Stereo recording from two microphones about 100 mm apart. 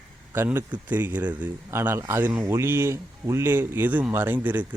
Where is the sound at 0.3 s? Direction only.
20° right (ahead or behind).